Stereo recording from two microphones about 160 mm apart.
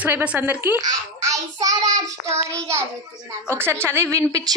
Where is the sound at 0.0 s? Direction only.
10° right (ahead or behind).